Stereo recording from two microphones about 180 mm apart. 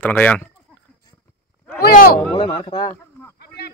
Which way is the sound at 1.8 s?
55° left (ahead or behind).